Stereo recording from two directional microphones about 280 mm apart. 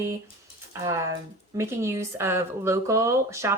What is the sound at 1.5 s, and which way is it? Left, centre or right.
Speech, centre.